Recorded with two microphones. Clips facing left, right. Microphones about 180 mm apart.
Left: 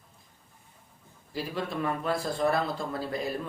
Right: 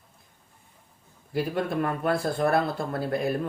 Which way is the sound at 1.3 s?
55° right (ahead or behind).